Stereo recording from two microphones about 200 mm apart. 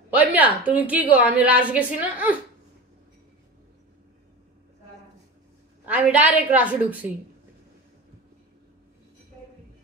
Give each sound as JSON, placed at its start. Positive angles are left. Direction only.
{"t": 0.1, "sound": "a woman's voice", "side_deg": -10}
{"t": 5.9, "sound": "a woman's voice", "side_deg": -5}